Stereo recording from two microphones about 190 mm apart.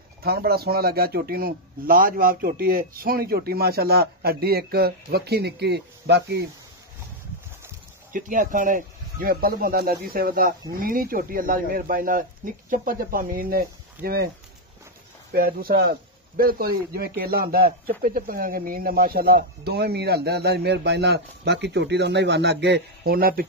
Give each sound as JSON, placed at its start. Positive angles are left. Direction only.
{"t": 0.2, "sound": "a man's voice", "side_deg": -55}
{"t": 8.1, "sound": "speech", "side_deg": -45}
{"t": 15.3, "sound": "a man's voice", "side_deg": -50}